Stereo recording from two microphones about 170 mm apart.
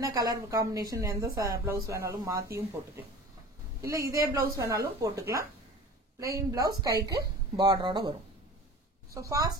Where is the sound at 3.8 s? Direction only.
20° right (ahead or behind).